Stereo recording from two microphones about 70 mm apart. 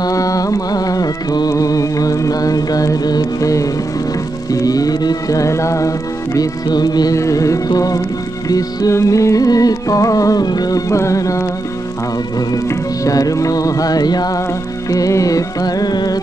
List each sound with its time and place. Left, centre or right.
0.0 s music: left
5.4 s music: left
7.2 s music: left
10.9 s mantra: left
12.6 s music: left
14.9 s music: left